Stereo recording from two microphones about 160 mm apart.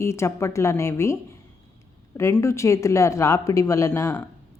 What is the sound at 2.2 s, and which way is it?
Speech, 15° left (ahead or behind).